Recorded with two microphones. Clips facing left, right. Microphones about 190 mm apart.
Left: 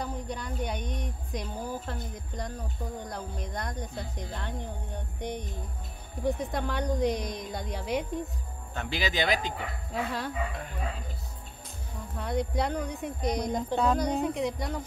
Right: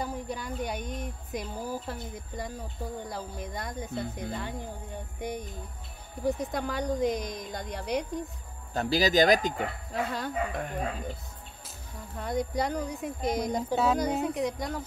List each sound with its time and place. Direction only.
0.0 s speech: 5° right (ahead or behind)
8.7 s speech: 40° right (ahead or behind)
9.9 s speech: centre (ahead or behind)
10.6 s speech: 55° right (ahead or behind)
12.2 s speech: centre (ahead or behind)